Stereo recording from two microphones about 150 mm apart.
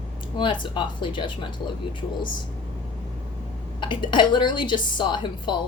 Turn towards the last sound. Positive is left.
turn(degrees=30)  # may be behind; listen again after turning